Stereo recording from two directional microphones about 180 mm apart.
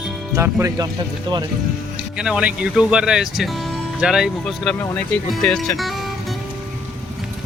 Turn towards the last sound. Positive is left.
turn(degrees=0)  # may be behind; listen again after turning